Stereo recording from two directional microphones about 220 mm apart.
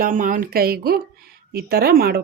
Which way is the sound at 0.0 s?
35° right (ahead or behind).